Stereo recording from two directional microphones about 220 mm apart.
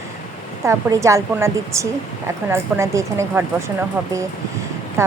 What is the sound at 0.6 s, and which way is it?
A woman's voice, 15° right (ahead or behind).